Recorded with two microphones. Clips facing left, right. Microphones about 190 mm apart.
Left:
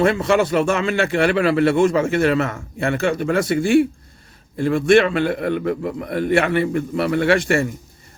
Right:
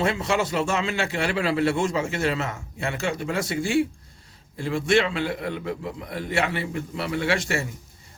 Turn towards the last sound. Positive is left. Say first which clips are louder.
# left 8 dB
turn(degrees=55)  # may be behind; listen again after turning